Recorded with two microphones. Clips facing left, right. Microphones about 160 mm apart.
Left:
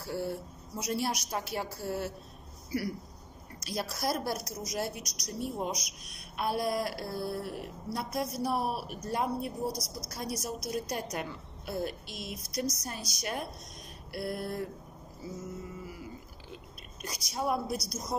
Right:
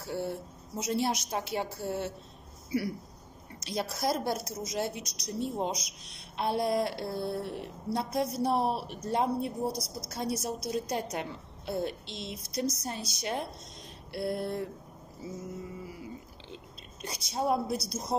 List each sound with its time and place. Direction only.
0.0 s a woman's voice: 20° right (ahead or behind)
3.5 s a woman's voice: 25° right (ahead or behind)
15.8 s a sound: 25° right (ahead or behind)
17.0 s a woman's voice: 30° right (ahead or behind)